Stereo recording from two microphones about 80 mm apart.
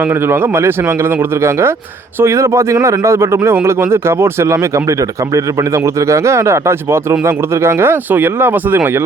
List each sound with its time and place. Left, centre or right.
0.0 s speech: right